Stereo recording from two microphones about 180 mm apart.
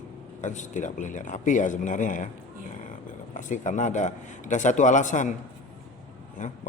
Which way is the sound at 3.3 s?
45° left (ahead or behind).